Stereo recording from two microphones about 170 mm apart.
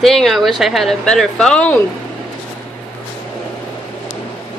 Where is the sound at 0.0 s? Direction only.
Centre (ahead or behind).